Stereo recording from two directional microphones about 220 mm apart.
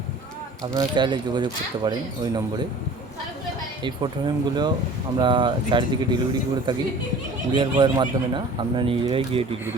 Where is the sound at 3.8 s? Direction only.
20° right (ahead or behind).